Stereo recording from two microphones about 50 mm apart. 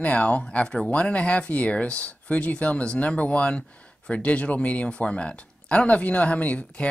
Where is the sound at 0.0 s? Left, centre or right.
Left.